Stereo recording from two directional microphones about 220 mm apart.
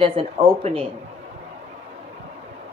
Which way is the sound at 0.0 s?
25° right (ahead or behind).